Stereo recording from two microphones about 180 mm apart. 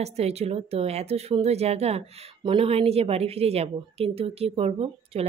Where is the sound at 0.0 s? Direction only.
35° right (ahead or behind).